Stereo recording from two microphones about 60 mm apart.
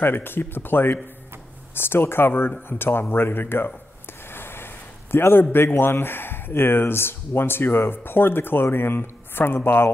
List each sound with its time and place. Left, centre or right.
0.0 s speech: left
4.3 s a sound: left
5.1 s speech: left